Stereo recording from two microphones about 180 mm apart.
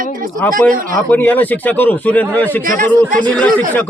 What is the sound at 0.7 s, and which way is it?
Speech, 50° right (ahead or behind).